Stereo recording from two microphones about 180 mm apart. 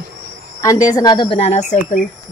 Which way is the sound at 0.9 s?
20° left (ahead or behind).